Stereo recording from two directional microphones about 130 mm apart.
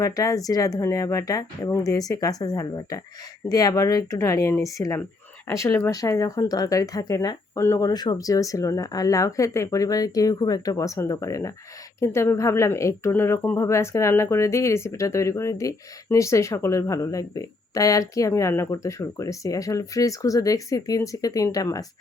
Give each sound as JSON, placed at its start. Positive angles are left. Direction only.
{"t": 0.0, "sound": "speech", "side_deg": 25}